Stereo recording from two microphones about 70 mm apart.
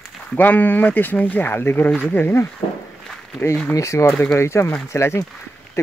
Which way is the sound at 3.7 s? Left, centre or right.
Left.